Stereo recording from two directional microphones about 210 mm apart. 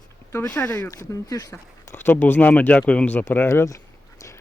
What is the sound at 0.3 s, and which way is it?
Speech, 10° left (ahead or behind).